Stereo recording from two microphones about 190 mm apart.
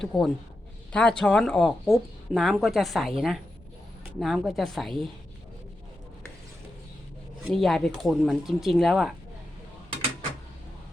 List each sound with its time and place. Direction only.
0.0 s speech: centre (ahead or behind)
7.4 s speech: centre (ahead or behind)